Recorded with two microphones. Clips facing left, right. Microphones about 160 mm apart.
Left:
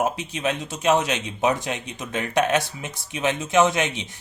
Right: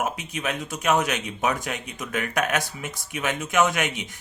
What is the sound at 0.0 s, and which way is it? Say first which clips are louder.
Speech: left 4 dB; 30° left (ahead or behind).